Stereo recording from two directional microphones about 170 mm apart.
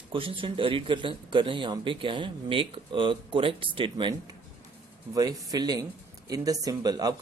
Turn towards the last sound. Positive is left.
turn(degrees=-20)  # may be behind; listen again after turning